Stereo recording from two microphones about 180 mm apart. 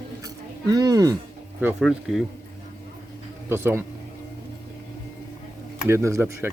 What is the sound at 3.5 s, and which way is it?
Speech, 15° right (ahead or behind).